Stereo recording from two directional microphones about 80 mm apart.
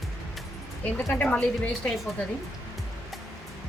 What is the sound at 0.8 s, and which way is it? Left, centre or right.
A woman's voice, centre.